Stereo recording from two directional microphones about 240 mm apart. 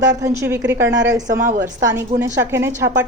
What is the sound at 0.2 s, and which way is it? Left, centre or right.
Speech, centre.